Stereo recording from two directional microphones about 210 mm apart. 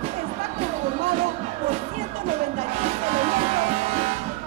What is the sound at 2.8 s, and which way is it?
Music, 35° right (ahead or behind).